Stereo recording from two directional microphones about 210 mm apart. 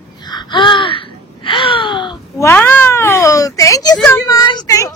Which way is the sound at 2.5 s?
10° left (ahead or behind).